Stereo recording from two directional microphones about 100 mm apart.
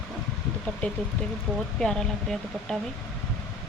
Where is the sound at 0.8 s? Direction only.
15° left (ahead or behind).